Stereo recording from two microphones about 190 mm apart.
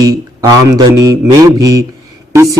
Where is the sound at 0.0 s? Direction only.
20° right (ahead or behind).